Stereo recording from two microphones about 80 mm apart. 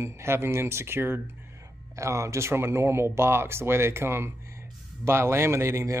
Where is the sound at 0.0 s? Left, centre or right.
Right.